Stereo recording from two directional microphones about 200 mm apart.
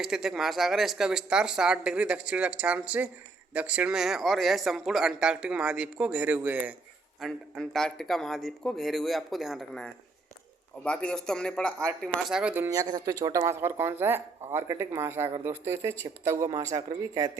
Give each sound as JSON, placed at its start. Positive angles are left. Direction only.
{"t": 0.0, "sound": "speech", "side_deg": 0}